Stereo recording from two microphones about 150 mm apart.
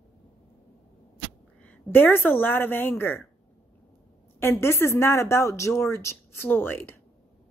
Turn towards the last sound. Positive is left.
turn(degrees=15)  # may be behind; listen again after turning